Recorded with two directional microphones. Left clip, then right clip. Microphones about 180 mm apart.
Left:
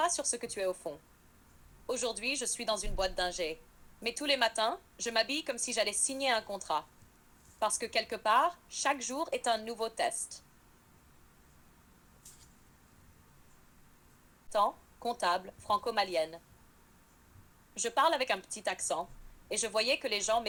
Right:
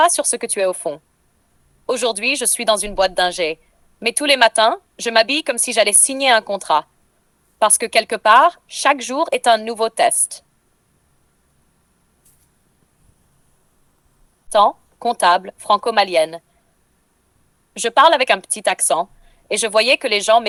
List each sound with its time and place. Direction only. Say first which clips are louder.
0.0 s speech: right 17 dB; 45° right (ahead or behind)
14.5 s speech: right 16 dB; 45° right (ahead or behind)
17.7 s speech: right 17 dB; 45° right (ahead or behind)